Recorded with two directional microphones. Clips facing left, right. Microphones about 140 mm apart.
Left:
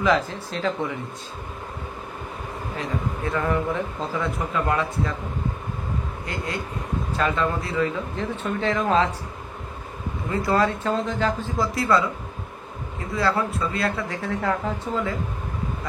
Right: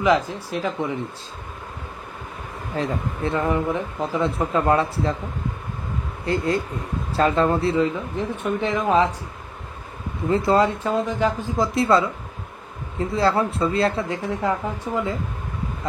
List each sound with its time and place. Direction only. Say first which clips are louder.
0.3 s speech: even; 15° right (ahead or behind)
2.8 s speech: right 3 dB; 35° right (ahead or behind)
3.3 s speech: right 2 dB; 20° right (ahead or behind)
6.2 s speech: right 11 dB; 30° right (ahead or behind)
7.7 s speech: right 3 dB; 20° right (ahead or behind)
10.3 s speech: right 3 dB; 20° right (ahead or behind)
13.1 s speech: right 3 dB; 25° right (ahead or behind)